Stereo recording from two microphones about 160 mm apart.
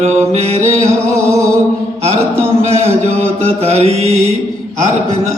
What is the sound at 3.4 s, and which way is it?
Mantra, 40° right (ahead or behind).